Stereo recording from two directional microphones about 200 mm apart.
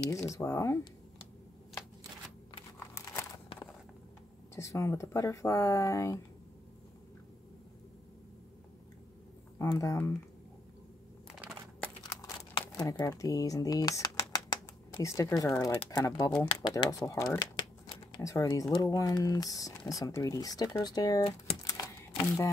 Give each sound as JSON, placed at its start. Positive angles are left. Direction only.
{"t": 0.3, "sound": "speech", "side_deg": 15}
{"t": 4.6, "sound": "speech", "side_deg": 15}
{"t": 9.6, "sound": "speech", "side_deg": 15}
{"t": 11.8, "sound": "a sound", "side_deg": 15}
{"t": 12.5, "sound": "speech", "side_deg": 20}
{"t": 21.6, "sound": "camera", "side_deg": 15}